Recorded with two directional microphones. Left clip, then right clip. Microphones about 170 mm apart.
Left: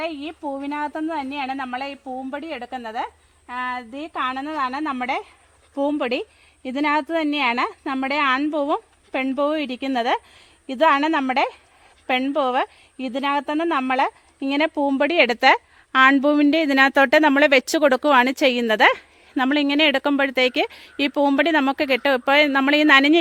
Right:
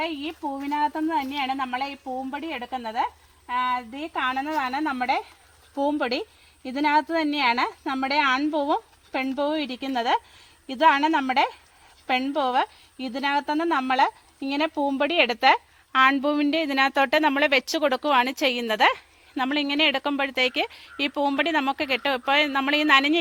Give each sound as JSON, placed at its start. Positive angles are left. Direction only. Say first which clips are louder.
{"t": 0.0, "sound": "a woman's voice", "louder": "left 1 dB", "side_deg": 15}